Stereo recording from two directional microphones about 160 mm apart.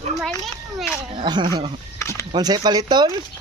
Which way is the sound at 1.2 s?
30° right (ahead or behind).